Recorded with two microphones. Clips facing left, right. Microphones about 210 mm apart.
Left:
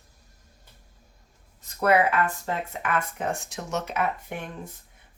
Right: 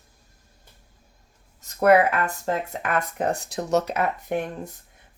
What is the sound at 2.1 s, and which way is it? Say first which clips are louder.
Speech: right 1 dB; 40° right (ahead or behind).